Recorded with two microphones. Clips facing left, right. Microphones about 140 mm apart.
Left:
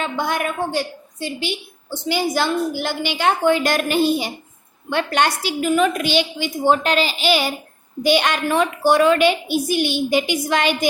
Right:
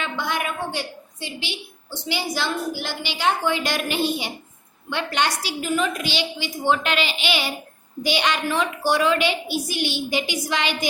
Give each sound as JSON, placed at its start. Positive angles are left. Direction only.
{"t": 0.0, "sound": "a woman's voice", "side_deg": 45}